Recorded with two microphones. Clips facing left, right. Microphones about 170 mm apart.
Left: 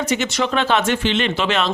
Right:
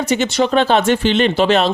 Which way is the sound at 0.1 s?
35° right (ahead or behind).